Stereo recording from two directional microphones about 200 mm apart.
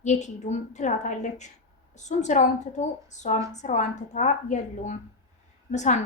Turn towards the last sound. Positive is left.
turn(degrees=35)  # may be behind; listen again after turning